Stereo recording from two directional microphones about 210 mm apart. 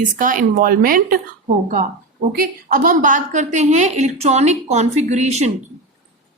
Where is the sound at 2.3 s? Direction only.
40° right (ahead or behind).